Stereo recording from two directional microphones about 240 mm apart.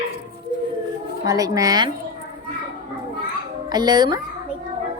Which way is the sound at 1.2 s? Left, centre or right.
Centre.